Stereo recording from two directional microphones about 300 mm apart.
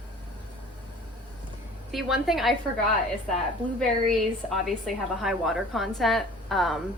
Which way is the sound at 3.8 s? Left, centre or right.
Centre.